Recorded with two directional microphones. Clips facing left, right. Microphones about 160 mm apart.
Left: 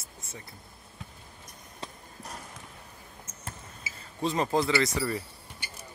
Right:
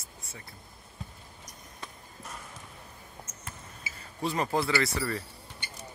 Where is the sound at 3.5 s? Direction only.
25° left (ahead or behind).